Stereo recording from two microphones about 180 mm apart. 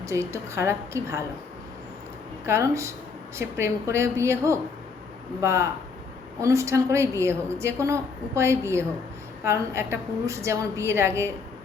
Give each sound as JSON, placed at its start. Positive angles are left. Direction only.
{"t": 0.0, "sound": "a woman's voice", "side_deg": -15}
{"t": 2.5, "sound": "a woman's voice", "side_deg": -15}